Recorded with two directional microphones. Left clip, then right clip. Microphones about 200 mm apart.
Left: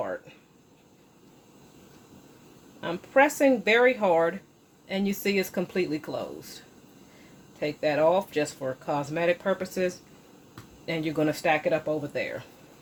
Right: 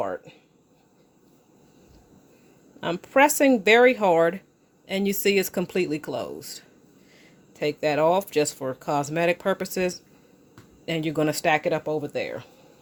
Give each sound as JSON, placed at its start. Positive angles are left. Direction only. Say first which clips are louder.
{"t": 0.0, "sound": "a sound", "louder": "right 3 dB", "side_deg": -45}
{"t": 2.8, "sound": "speech", "louder": "right 3 dB", "side_deg": -50}
{"t": 7.6, "sound": "speech", "louder": "right 2 dB", "side_deg": -50}